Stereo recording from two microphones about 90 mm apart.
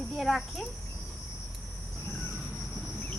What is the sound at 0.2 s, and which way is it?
Speech, centre (ahead or behind).